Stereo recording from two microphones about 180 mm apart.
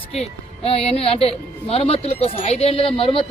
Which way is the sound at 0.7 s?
35° left (ahead or behind).